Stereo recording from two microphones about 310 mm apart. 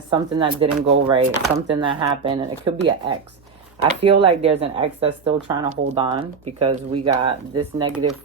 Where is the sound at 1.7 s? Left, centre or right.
Centre.